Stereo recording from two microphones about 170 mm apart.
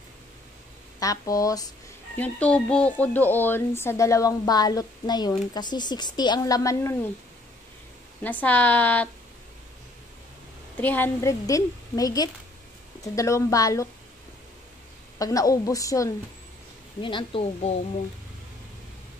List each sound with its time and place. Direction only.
0.9 s a woman's voice: 20° left (ahead or behind)
2.1 s a woman's voice: 10° left (ahead or behind)
8.2 s speech: 10° left (ahead or behind)
10.8 s a woman's voice: 10° left (ahead or behind)
15.1 s a woman's voice: 20° left (ahead or behind)